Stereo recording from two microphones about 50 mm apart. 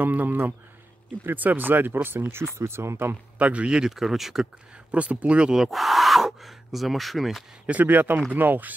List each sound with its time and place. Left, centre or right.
0.0 s speech: right
2.3 s speech: right
3.3 s speech: right
3.9 s speech: centre
4.9 s speech: right
5.5 s speech: centre
7.6 s speech: right